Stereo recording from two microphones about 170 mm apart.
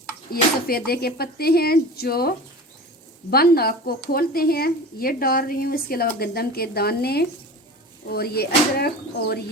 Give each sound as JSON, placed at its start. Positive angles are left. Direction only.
{"t": 0.3, "sound": "speech", "side_deg": 65}